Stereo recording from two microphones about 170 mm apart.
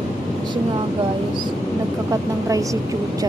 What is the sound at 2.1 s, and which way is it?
Speech, 20° right (ahead or behind).